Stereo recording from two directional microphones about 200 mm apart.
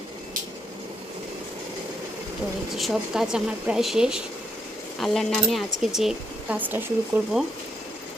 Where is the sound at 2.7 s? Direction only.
Centre (ahead or behind).